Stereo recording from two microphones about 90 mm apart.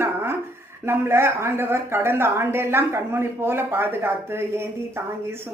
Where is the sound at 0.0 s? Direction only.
25° right (ahead or behind).